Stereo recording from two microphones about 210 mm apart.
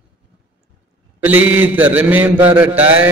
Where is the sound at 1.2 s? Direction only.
10° right (ahead or behind).